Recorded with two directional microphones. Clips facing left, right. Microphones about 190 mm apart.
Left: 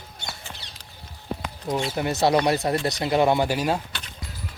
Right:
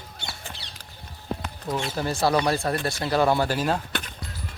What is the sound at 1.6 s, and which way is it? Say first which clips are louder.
Speech: left 2 dB; 20° left (ahead or behind).